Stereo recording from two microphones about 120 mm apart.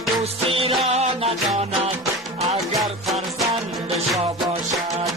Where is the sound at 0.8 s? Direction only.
65° right (ahead or behind).